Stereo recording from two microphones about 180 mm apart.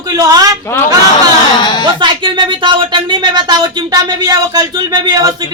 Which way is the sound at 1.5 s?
25° left (ahead or behind).